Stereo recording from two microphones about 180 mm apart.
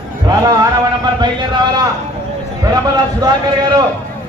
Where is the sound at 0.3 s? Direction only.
20° right (ahead or behind).